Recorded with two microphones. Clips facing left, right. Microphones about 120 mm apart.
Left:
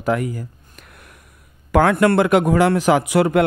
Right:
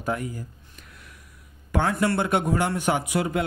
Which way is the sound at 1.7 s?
75° left (ahead or behind).